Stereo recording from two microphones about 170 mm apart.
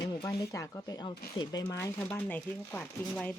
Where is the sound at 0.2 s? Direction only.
20° left (ahead or behind).